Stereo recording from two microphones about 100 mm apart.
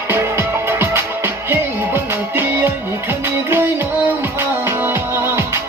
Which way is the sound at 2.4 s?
25° right (ahead or behind).